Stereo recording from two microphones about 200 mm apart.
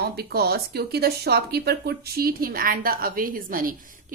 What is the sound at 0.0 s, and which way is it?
Speech, 50° right (ahead or behind).